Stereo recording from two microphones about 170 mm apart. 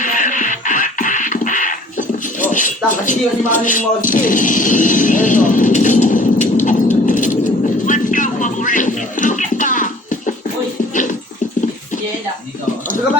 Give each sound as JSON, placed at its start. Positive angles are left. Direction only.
{"t": 0.0, "sound": "music", "side_deg": 50}